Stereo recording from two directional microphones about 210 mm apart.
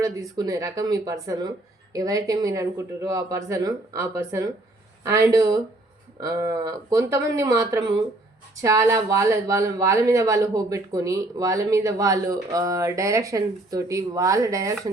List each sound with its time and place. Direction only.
0.0 s speech: 15° right (ahead or behind)